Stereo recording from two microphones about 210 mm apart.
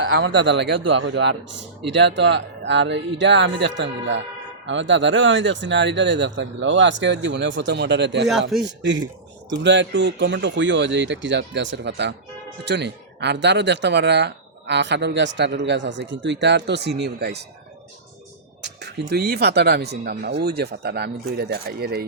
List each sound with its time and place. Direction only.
0.0 s speech: 60° right (ahead or behind)
8.3 s a man's voice: centre (ahead or behind)
8.6 s speech: 55° right (ahead or behind)
18.6 s speech: 55° right (ahead or behind)